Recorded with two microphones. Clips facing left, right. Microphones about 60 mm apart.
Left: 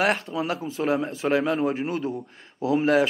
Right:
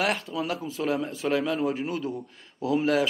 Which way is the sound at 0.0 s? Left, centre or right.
Left.